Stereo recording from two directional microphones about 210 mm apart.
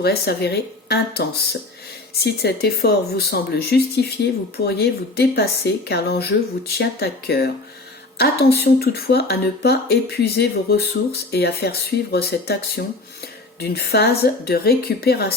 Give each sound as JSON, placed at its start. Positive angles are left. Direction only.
{"t": 0.0, "sound": "speech", "side_deg": 50}